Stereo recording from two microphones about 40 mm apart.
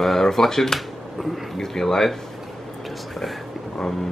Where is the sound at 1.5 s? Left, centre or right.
Centre.